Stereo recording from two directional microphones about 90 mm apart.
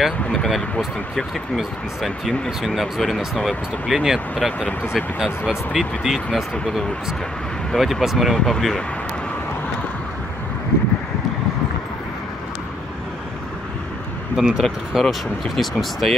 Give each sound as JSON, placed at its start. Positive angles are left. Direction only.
{"t": 0.0, "sound": "speech", "side_deg": 0}
{"t": 4.6, "sound": "speech", "side_deg": 15}
{"t": 5.5, "sound": "speech", "side_deg": -5}
{"t": 7.7, "sound": "speech", "side_deg": 0}
{"t": 14.3, "sound": "speech", "side_deg": -5}